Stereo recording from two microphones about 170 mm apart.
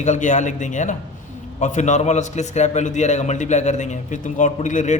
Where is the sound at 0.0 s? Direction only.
45° left (ahead or behind).